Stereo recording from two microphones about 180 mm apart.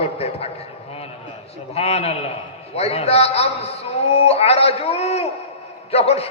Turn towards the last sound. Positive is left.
turn(degrees=35)  # may be behind; listen again after turning